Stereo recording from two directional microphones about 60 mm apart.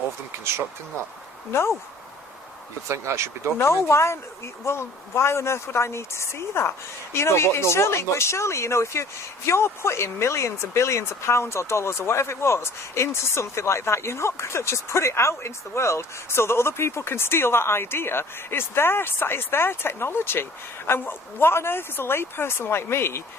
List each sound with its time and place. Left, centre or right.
2.9 s speech: right
3.6 s speech: left